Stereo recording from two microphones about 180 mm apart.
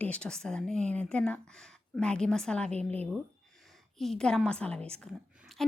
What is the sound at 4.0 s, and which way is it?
A woman's voice, centre (ahead or behind).